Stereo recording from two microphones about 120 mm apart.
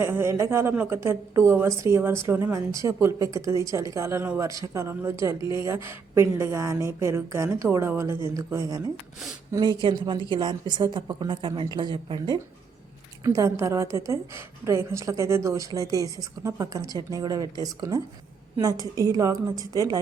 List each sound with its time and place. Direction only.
0.0 s speech: 20° right (ahead or behind)
9.5 s a woman's voice: 35° right (ahead or behind)
13.2 s a woman's voice: 25° right (ahead or behind)